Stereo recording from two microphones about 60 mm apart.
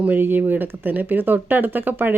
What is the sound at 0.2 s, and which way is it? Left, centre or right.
Speech, right.